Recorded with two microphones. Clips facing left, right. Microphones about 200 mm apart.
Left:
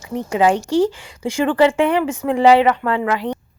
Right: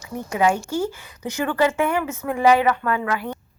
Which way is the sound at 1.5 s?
15° left (ahead or behind).